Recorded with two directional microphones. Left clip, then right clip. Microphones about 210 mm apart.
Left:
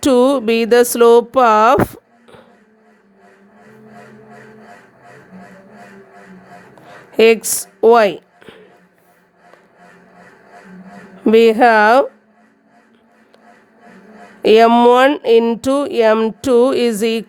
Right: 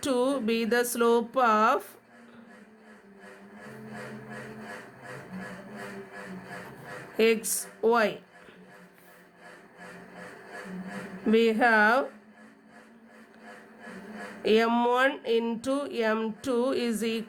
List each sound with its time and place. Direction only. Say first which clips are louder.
0.0 s speech: left 15 dB; 50° left (ahead or behind)
7.2 s a woman's voice: left 14 dB; 50° left (ahead or behind)
11.3 s speech: left 13 dB; 50° left (ahead or behind)
14.4 s speech: left 15 dB; 50° left (ahead or behind)